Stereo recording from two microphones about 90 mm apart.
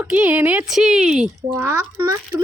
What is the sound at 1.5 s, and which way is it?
Speech, 30° right (ahead or behind).